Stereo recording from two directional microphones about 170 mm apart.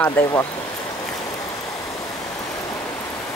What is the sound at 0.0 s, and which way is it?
Speech, 15° left (ahead or behind).